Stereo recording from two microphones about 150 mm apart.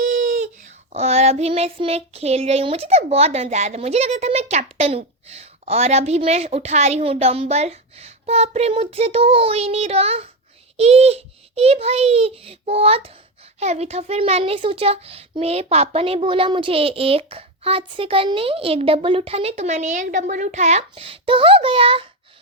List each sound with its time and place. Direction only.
0.9 s child singing: 45° right (ahead or behind)
13.6 s a child's voice: 45° right (ahead or behind)